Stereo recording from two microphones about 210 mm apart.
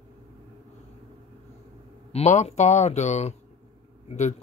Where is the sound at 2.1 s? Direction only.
30° left (ahead or behind).